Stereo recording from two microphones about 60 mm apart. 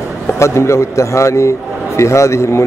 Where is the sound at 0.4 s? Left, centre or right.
Left.